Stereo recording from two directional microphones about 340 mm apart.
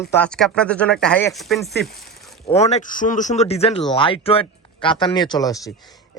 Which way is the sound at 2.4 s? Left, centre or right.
Centre.